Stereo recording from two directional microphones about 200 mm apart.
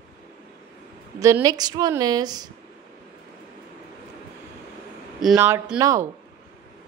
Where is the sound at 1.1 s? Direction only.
15° right (ahead or behind).